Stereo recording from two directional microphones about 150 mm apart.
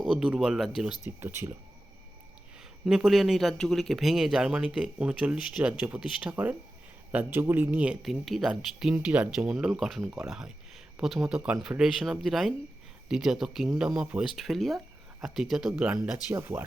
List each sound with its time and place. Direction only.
0.1 s speech: 5° right (ahead or behind)
1.2 s speech: 15° right (ahead or behind)
2.8 s speech: 5° right (ahead or behind)
16.3 s speech: 15° right (ahead or behind)